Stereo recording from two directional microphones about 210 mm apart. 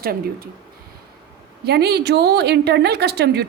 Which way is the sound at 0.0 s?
45° right (ahead or behind).